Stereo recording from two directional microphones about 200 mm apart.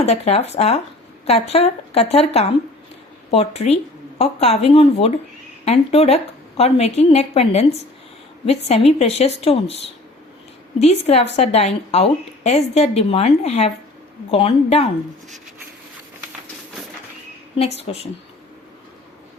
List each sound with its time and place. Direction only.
0.0 s a woman's voice: 35° left (ahead or behind)
10.8 s a woman's voice: 30° left (ahead or behind)
17.6 s a woman's voice: 30° left (ahead or behind)